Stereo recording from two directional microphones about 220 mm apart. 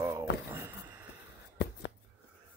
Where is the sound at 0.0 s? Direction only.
15° right (ahead or behind).